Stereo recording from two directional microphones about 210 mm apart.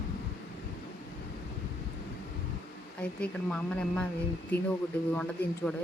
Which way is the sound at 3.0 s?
5° left (ahead or behind).